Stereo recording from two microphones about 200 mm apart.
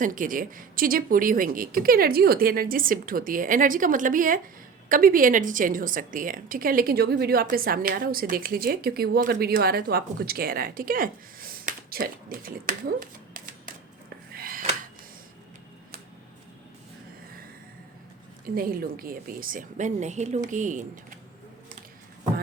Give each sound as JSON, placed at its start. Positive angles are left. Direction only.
{"t": 0.0, "sound": "a woman's voice", "side_deg": -40}
{"t": 14.3, "sound": "a sound", "side_deg": -45}
{"t": 18.4, "sound": "a woman's voice", "side_deg": -45}